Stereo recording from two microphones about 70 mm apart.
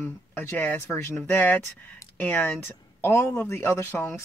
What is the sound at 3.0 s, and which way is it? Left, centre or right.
Speech, left.